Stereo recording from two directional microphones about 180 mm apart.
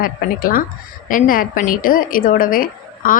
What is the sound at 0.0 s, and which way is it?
A woman's voice, 50° left (ahead or behind).